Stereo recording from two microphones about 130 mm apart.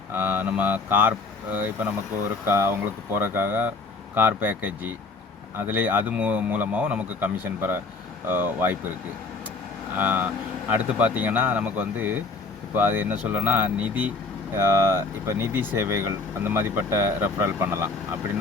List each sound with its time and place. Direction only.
0.1 s speech: 15° right (ahead or behind)
10.0 s speech: 15° right (ahead or behind)